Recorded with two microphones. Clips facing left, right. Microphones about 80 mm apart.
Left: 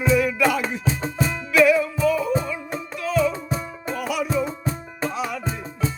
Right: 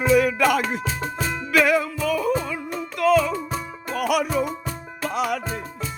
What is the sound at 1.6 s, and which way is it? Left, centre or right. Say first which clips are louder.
Music: left 3 dB; right.